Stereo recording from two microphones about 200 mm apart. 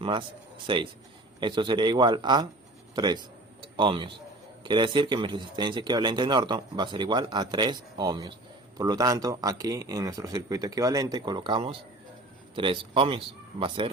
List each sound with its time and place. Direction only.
0.0 s a man's voice: 25° right (ahead or behind)